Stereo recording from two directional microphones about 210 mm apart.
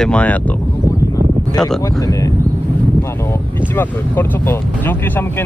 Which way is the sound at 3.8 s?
10° left (ahead or behind).